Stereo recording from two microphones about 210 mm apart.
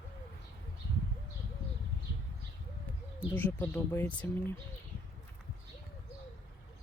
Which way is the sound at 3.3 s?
10° left (ahead or behind).